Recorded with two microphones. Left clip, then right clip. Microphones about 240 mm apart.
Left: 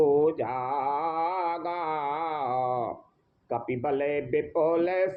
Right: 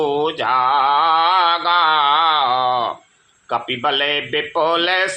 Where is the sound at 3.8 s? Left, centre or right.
Right.